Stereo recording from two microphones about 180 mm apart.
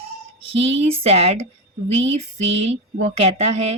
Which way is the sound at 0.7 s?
35° right (ahead or behind).